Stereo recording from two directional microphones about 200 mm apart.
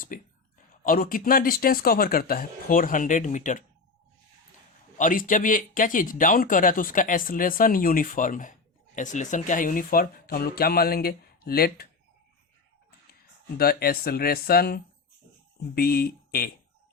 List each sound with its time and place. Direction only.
0.1 s a sound: 40° left (ahead or behind)
0.9 s speech: 45° left (ahead or behind)
4.9 s speech: 40° left (ahead or behind)
13.6 s speech: 50° left (ahead or behind)